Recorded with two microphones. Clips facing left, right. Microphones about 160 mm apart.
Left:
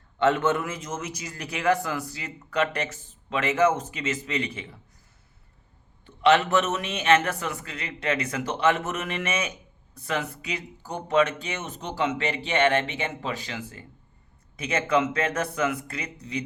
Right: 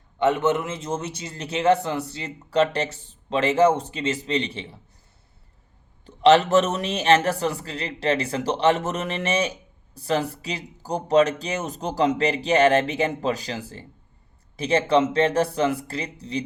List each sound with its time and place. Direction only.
0.2 s a man's voice: 15° right (ahead or behind)
6.1 s a man's voice: 35° right (ahead or behind)